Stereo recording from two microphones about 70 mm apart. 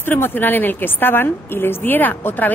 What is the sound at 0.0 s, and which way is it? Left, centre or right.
A woman's voice, left.